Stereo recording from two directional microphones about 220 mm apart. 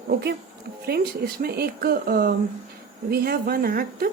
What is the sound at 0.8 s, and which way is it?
Speech, 45° right (ahead or behind).